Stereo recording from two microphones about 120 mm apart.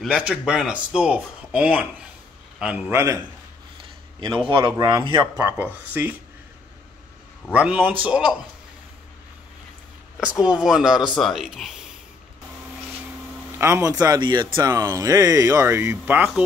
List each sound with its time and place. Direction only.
0.0 s speech: 10° right (ahead or behind)
2.9 s speech: 25° right (ahead or behind)
4.5 s speech: 45° right (ahead or behind)
5.5 s speech: 15° right (ahead or behind)
7.5 s speech: 10° right (ahead or behind)
10.4 s speech: 5° right (ahead or behind)
13.6 s speech: 25° right (ahead or behind)
14.0 s speech: 35° right (ahead or behind); by 16.3 s 15° right (ahead or behind)